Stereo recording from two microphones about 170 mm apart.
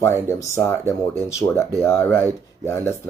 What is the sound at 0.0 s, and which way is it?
Speech, 15° left (ahead or behind).